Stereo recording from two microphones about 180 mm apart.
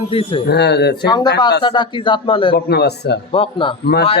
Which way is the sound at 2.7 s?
65° left (ahead or behind).